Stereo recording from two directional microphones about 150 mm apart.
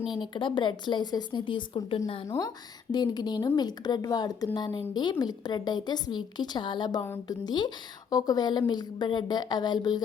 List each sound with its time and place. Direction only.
0.2 s speech: 30° left (ahead or behind)
2.2 s a woman's voice: 20° left (ahead or behind)
7.0 s speech: 15° left (ahead or behind)
7.4 s a woman's voice: 30° left (ahead or behind)